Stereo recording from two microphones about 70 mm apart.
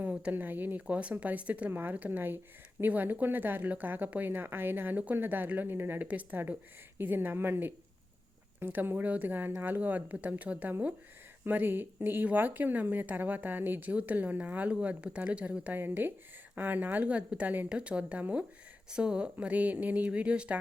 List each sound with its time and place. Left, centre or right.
0.1 s a sound: centre
0.3 s speech: right
15.8 s speech: right
17.7 s speech: centre